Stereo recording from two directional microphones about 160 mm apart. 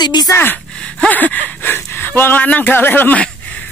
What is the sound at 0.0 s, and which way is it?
Speech, 25° left (ahead or behind).